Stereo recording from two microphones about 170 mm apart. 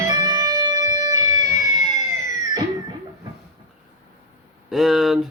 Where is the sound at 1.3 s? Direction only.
20° right (ahead or behind).